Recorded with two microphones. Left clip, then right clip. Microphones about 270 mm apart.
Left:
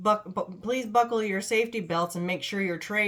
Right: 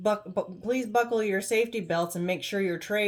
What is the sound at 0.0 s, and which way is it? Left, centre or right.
Speech, centre.